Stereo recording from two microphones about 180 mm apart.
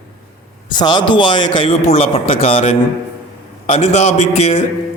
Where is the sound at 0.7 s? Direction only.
25° left (ahead or behind).